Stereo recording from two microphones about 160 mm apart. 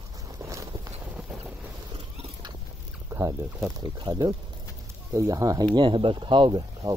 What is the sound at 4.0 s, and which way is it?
Speech, 25° right (ahead or behind).